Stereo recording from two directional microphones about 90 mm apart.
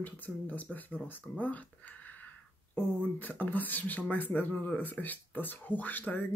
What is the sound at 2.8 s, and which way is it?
Speech, 20° left (ahead or behind).